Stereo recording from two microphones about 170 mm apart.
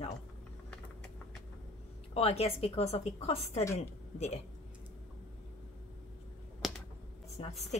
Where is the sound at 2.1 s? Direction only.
35° left (ahead or behind).